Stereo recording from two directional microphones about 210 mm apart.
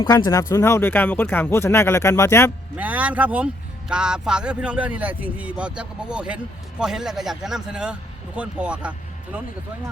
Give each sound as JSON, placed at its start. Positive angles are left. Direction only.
{"t": 0.0, "sound": "speech", "side_deg": 15}
{"t": 2.7, "sound": "speech", "side_deg": -5}